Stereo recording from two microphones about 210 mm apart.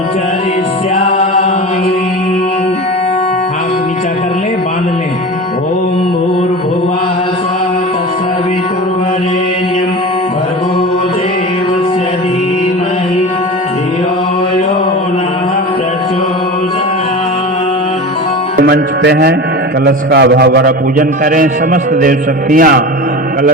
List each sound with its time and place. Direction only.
18.5 s music: 55° right (ahead or behind)
20.1 s a man's voice: 50° right (ahead or behind)